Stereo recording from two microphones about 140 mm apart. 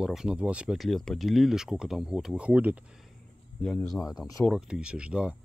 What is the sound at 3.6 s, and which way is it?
Speech, centre (ahead or behind).